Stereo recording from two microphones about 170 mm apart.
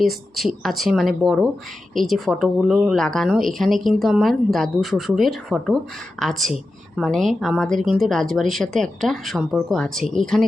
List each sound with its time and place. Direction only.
0.0 s a woman's voice: centre (ahead or behind)